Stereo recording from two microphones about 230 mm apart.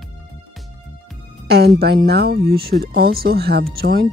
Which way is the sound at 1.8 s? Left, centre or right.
Right.